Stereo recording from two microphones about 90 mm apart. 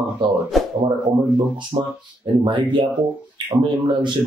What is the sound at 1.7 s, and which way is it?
Speech, 75° right (ahead or behind).